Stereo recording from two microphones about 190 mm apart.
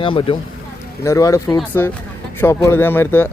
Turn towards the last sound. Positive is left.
turn(degrees=10)  # may be behind; listen again after turning